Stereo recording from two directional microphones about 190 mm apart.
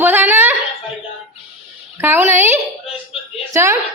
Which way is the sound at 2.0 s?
10° right (ahead or behind).